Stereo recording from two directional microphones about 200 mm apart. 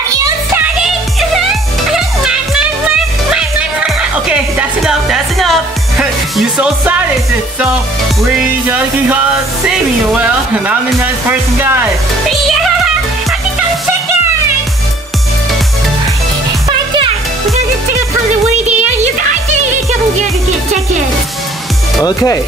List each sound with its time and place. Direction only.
0.1 s music: 15° right (ahead or behind)
0.7 s music: centre (ahead or behind)
8.6 s music: 10° right (ahead or behind)
9.7 s speech: 5° right (ahead or behind)
11.6 s music: 10° right (ahead or behind)
12.3 s music: centre (ahead or behind)
16.6 s music: 25° right (ahead or behind)
18.7 s music: 35° right (ahead or behind)
22.0 s speech: 15° left (ahead or behind)